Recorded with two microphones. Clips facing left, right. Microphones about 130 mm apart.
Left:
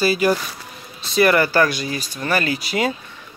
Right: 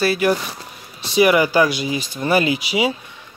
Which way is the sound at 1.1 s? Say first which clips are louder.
Right 1 dB; 10° right (ahead or behind).